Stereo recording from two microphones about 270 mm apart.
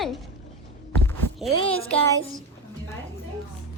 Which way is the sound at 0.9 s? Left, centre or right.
Centre.